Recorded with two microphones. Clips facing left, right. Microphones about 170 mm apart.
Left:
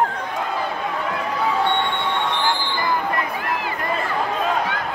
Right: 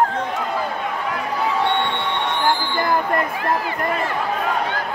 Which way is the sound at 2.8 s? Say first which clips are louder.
Right 3 dB; 50° right (ahead or behind).